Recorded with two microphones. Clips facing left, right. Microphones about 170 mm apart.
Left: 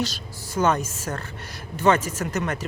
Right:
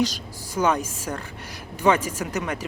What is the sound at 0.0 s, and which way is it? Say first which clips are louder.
A woman's voice: right 4 dB; 10° right (ahead or behind).